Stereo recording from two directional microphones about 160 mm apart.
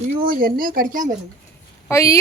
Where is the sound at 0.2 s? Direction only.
65° right (ahead or behind).